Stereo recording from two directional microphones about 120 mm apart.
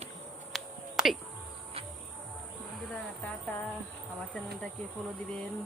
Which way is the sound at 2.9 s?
15° left (ahead or behind).